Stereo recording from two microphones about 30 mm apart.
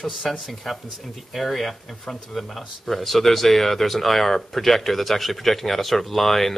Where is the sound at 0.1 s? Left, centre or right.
Centre.